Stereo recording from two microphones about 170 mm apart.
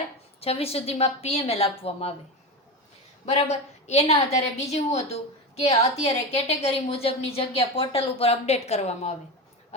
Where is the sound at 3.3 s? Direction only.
40° left (ahead or behind).